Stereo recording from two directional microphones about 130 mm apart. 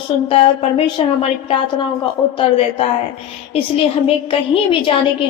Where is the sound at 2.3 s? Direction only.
50° left (ahead or behind).